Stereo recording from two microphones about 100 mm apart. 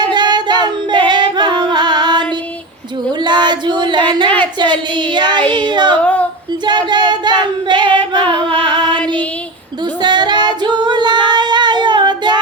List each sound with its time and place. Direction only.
0.0 s singing: 45° right (ahead or behind)
3.2 s female singing: 50° right (ahead or behind)
4.9 s child singing: 50° right (ahead or behind)
6.0 s a sound: 15° left (ahead or behind)
6.7 s female singing: 50° right (ahead or behind)
8.4 s singing: 50° right (ahead or behind)
10.0 s female singing: 50° right (ahead or behind)